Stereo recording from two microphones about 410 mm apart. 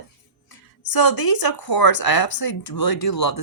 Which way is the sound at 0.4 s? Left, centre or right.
Left.